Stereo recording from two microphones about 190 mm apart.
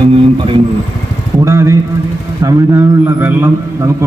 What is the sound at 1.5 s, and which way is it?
A man's voice, 15° right (ahead or behind).